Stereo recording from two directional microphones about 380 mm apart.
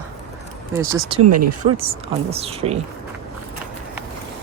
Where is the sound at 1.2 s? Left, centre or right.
Right.